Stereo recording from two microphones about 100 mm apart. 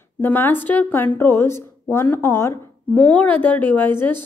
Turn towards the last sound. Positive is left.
turn(degrees=20)  # may be behind; listen again after turning